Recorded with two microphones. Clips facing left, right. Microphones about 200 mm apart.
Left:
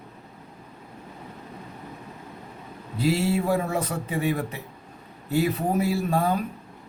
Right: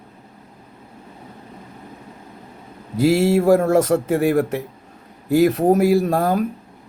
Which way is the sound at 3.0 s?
85° right.